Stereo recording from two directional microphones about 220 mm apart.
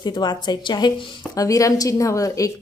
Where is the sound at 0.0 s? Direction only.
20° left (ahead or behind).